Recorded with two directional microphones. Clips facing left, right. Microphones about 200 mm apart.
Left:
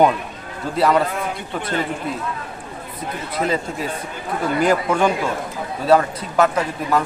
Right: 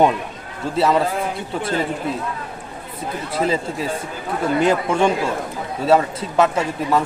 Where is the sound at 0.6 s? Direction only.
25° right (ahead or behind).